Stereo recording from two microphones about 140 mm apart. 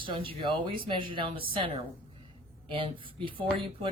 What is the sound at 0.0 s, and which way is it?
Speech, 35° right (ahead or behind).